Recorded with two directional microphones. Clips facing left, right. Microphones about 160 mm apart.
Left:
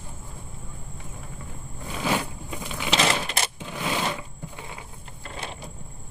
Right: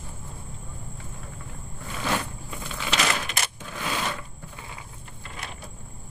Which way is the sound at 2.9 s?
30° left (ahead or behind).